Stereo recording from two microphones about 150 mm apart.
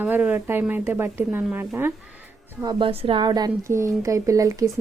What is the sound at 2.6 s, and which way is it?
A woman's voice, 30° right (ahead or behind).